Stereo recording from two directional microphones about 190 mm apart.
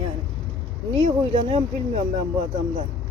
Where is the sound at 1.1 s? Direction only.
30° right (ahead or behind).